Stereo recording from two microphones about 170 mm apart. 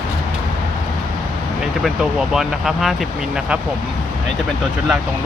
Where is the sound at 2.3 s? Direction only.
Centre (ahead or behind).